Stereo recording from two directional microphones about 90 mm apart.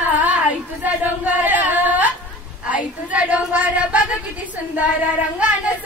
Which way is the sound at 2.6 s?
15° right (ahead or behind).